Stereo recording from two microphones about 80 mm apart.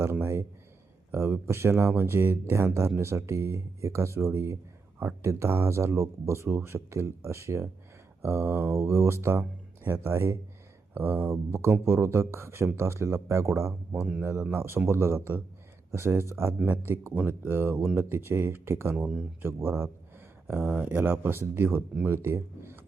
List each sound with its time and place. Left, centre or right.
0.0 s speech: right
18.9 s speech: centre
19.4 s speech: right
20.5 s speech: right